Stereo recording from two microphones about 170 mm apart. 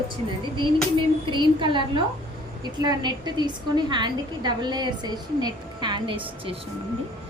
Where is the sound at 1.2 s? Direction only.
30° right (ahead or behind).